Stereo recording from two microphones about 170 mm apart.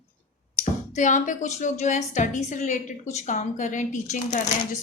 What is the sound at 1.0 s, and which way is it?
Speech, 45° left (ahead or behind).